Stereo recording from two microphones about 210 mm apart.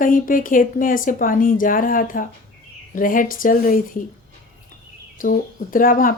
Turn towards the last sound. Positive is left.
turn(degrees=40)  # may be behind; listen again after turning